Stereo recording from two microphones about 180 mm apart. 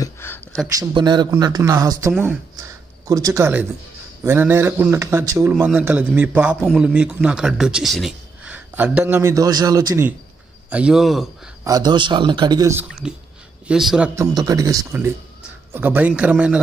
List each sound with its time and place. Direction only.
0.0 s a sound: 15° left (ahead or behind)
0.7 s a man's voice: 20° right (ahead or behind)
10.7 s a man's voice: 5° right (ahead or behind)
11.6 s speech: 20° right (ahead or behind)
13.0 s a man's voice: 5° right (ahead or behind)
14.1 s a man's voice: 20° right (ahead or behind)